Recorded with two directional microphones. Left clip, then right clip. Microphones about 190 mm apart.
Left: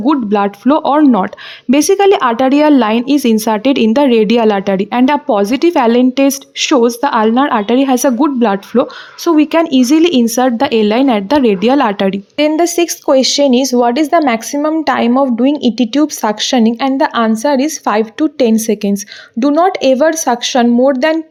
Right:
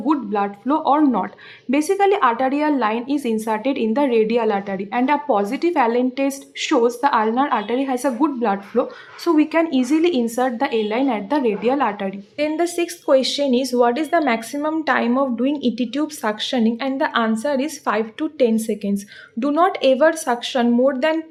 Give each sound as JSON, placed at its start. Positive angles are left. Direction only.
{"t": 0.0, "sound": "speech", "side_deg": 40}
{"t": 19.4, "sound": "speech", "side_deg": 30}